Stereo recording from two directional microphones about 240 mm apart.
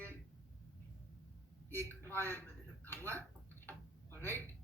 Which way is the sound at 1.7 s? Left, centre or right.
Centre.